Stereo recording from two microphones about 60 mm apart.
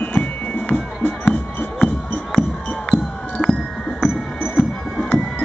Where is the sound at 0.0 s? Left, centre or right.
Left.